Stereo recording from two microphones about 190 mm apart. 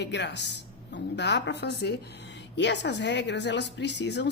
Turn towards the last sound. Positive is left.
turn(degrees=65)  # may be behind; listen again after turning